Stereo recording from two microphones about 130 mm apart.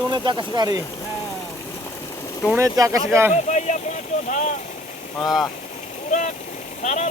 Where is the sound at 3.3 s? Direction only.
65° left (ahead or behind).